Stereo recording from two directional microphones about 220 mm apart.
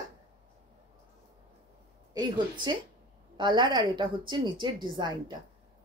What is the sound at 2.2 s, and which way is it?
A woman's voice, 20° right (ahead or behind).